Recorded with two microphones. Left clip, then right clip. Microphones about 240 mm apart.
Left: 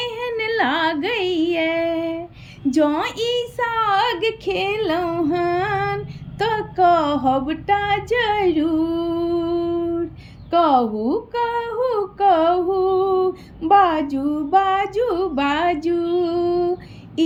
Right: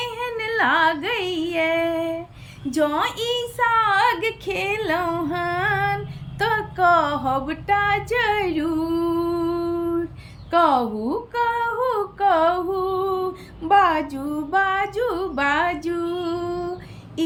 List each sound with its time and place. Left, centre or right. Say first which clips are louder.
0.0 s music: left 3 dB; centre
2.6 s a woman's voice: left 2 dB; centre
6.4 s female singing: left 2 dB; centre
10.5 s a woman's voice: left 2 dB; centre
10.9 s speech: left 4 dB; right
11.3 s female singing: even; centre
13.6 s a woman's voice: left 2 dB; centre
17.2 s vehicle: left 5 dB; centre